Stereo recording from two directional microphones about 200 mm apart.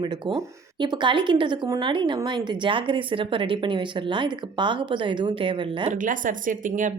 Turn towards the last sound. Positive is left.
turn(degrees=-40)  # may be behind; listen again after turning